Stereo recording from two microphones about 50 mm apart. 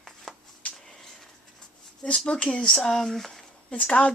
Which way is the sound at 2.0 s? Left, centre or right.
Centre.